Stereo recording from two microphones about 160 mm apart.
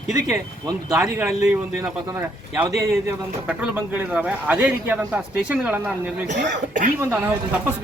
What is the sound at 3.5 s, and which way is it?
A man's voice, 5° right (ahead or behind).